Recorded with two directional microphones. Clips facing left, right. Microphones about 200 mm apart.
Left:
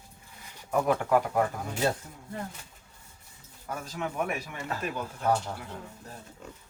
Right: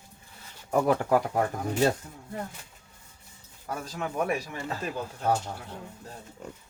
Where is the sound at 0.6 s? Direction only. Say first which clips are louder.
Right 2 dB; 40° right (ahead or behind).